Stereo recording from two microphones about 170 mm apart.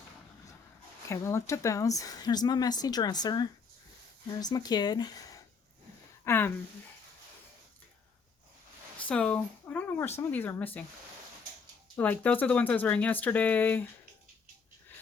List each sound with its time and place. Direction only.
1.0 s a woman's voice: 15° left (ahead or behind)
6.2 s a woman's voice: 10° left (ahead or behind)
9.0 s speech: 5° left (ahead or behind)
11.9 s speech: 10° left (ahead or behind)